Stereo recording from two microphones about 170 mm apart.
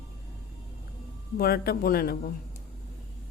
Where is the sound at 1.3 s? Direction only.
65° left (ahead or behind).